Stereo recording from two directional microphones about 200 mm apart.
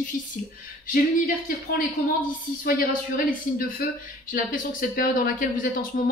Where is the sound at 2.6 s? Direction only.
45° left (ahead or behind).